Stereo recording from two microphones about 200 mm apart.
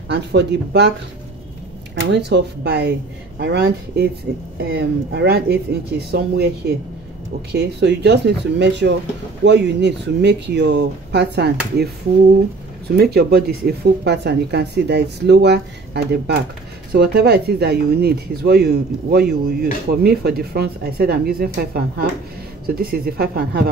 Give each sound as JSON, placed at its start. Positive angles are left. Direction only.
{"t": 0.1, "sound": "speech", "side_deg": -55}
{"t": 2.0, "sound": "speech", "side_deg": -60}
{"t": 12.9, "sound": "speech", "side_deg": -50}